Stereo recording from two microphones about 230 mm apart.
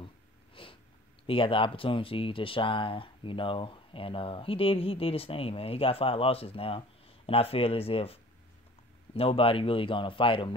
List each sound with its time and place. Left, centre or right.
0.6 s sniff: left
1.2 s speech: left